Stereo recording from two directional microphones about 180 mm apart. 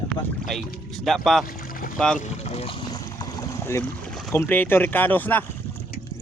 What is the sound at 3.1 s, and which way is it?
Boat, 20° left (ahead or behind).